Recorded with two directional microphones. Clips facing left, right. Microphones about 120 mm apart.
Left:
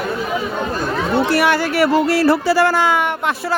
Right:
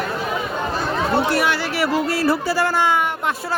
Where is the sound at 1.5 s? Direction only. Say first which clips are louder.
Left 6 dB; 50° left (ahead or behind).